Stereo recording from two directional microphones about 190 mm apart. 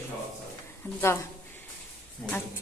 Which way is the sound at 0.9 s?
15° left (ahead or behind).